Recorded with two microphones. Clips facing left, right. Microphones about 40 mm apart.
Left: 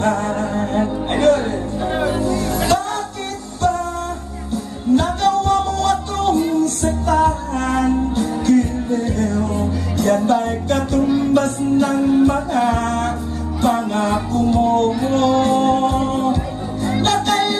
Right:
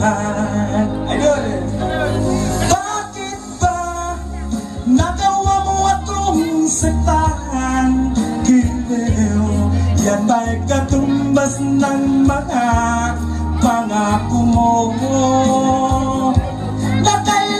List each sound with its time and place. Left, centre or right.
0.0 s music: centre
1.8 s music: centre
2.2 s music: centre
5.2 s music: centre